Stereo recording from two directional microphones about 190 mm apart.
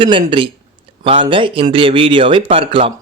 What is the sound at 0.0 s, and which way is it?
A man's voice, 25° right (ahead or behind).